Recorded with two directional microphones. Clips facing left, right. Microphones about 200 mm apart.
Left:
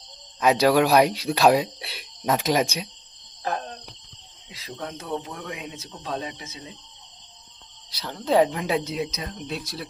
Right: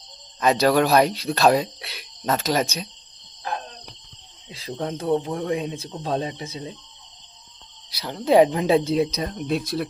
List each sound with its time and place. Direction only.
0.3 s speech: 10° left (ahead or behind)
4.5 s speech: 30° right (ahead or behind)
7.9 s speech: 10° right (ahead or behind)
8.5 s speech: 25° right (ahead or behind)
9.5 s speech: 55° right (ahead or behind)